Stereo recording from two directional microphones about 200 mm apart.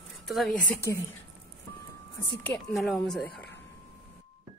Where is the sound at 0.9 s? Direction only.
15° left (ahead or behind).